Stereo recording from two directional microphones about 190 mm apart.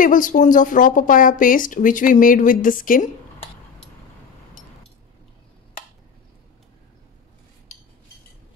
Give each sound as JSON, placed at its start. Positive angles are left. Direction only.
{"t": 0.0, "sound": "speech", "side_deg": 45}